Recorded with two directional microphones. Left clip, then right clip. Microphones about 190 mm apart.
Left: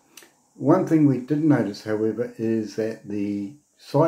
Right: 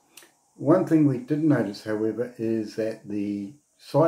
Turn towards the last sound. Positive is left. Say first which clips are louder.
# even
turn(degrees=-5)  # may be behind; listen again after turning